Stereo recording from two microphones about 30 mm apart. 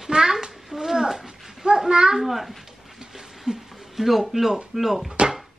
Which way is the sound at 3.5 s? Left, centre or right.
Right.